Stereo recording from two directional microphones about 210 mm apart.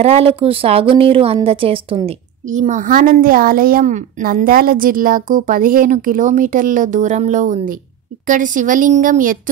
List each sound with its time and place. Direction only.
0.0 s a woman's voice: 30° right (ahead or behind)